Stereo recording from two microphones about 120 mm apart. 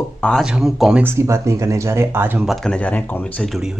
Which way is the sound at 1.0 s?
25° right (ahead or behind).